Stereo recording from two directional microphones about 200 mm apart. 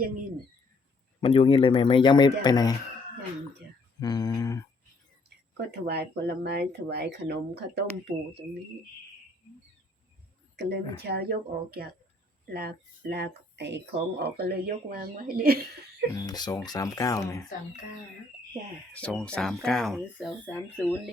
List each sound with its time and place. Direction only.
1.2 s speech: 25° left (ahead or behind)
4.0 s speech: 20° left (ahead or behind)
5.5 s speech: 55° right (ahead or behind)
10.6 s speech: 60° right (ahead or behind)
16.1 s speech: 20° left (ahead or behind)
18.9 s speech: 5° left (ahead or behind)